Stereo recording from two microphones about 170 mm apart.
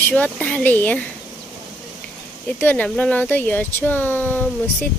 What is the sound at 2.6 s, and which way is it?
Speech, 10° left (ahead or behind).